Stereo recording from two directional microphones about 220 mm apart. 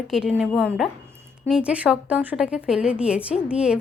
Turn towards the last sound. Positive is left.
turn(degrees=-5)  # may be behind; listen again after turning